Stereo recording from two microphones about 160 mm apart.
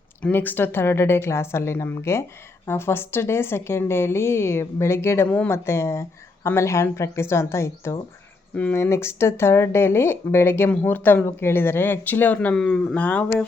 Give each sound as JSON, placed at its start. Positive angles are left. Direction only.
{"t": 0.2, "sound": "a woman's voice", "side_deg": 10}